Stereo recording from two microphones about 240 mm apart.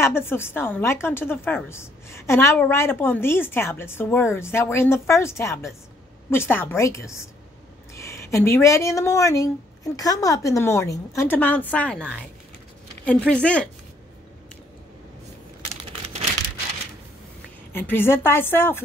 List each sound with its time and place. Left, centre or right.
0.0 s a woman's voice: centre
17.7 s a woman's voice: centre